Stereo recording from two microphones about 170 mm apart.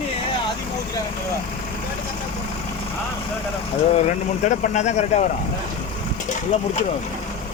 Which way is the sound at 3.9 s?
45° left (ahead or behind).